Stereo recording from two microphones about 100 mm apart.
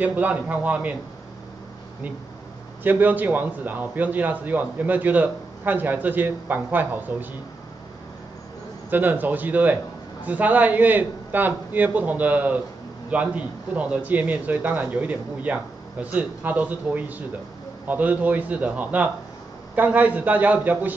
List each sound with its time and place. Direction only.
0.0 s a man's voice: 15° right (ahead or behind)
2.8 s a man's voice: 20° right (ahead or behind)
8.9 s a man's voice: 20° right (ahead or behind)